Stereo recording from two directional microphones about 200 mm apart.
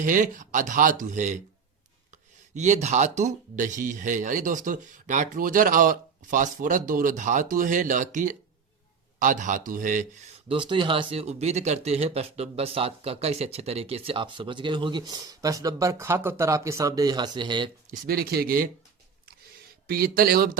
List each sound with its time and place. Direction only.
0.0 s speech: 40° right (ahead or behind)
2.6 s speech: 35° right (ahead or behind)
10.5 s speech: 25° right (ahead or behind)
18.0 s speech: 50° right (ahead or behind)
19.9 s speech: 50° right (ahead or behind)